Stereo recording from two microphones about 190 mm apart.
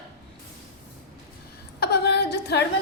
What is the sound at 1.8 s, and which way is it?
Speech, 60° left (ahead or behind).